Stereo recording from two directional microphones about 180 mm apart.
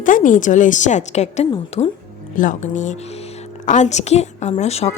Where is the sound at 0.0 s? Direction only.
45° left (ahead or behind).